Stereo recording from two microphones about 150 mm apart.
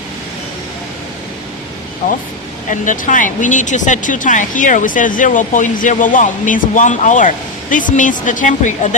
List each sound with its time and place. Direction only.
2.6 s speech: 60° left (ahead or behind)